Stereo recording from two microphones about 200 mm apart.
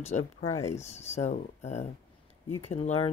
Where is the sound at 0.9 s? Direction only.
35° left (ahead or behind).